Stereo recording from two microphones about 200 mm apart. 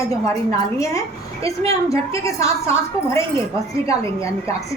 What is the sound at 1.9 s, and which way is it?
A woman's voice, 15° left (ahead or behind).